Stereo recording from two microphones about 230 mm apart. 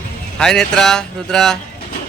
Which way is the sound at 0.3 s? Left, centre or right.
Centre.